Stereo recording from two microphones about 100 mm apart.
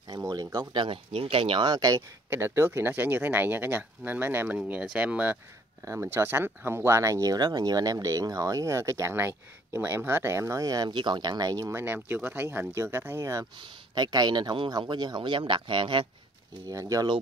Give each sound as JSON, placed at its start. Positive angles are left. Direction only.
{"t": 0.1, "sound": "speech", "side_deg": -40}
{"t": 0.7, "sound": "speech", "side_deg": -65}
{"t": 1.7, "sound": "speech", "side_deg": -35}
{"t": 2.2, "sound": "speech", "side_deg": -20}
{"t": 10.9, "sound": "speech", "side_deg": -50}
{"t": 11.7, "sound": "speech", "side_deg": -20}
{"t": 13.6, "sound": "speech", "side_deg": -45}
{"t": 16.6, "sound": "speech", "side_deg": -35}